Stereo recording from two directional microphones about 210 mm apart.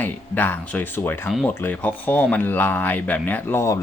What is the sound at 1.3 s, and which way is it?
Speech, centre (ahead or behind).